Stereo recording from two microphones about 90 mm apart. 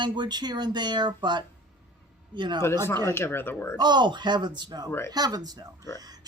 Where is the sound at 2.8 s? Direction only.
30° left (ahead or behind).